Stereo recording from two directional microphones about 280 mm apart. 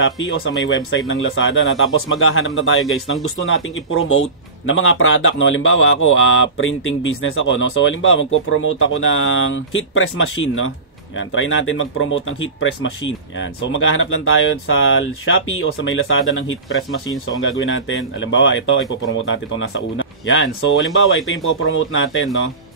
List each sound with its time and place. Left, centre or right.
0.0 s speech: left